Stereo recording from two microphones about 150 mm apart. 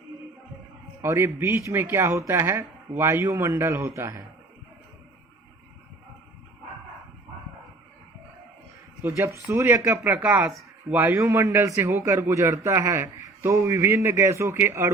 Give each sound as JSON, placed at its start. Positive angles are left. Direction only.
{"t": 1.0, "sound": "speech", "side_deg": -15}
{"t": 9.0, "sound": "speech", "side_deg": -15}